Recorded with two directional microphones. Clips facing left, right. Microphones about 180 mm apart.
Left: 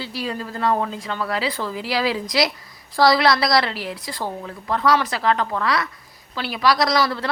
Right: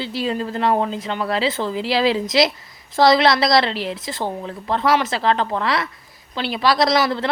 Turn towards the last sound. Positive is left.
turn(degrees=-25)  # may be behind; listen again after turning